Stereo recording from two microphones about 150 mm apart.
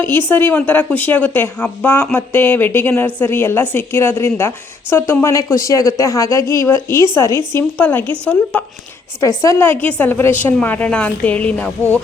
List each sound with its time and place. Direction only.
0.3 s a woman's voice: 15° left (ahead or behind)